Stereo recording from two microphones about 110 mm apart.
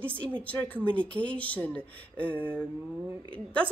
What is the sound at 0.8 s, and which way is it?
Speech, 10° left (ahead or behind).